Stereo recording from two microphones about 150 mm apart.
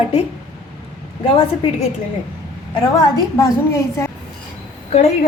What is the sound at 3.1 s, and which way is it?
Speech, 25° left (ahead or behind).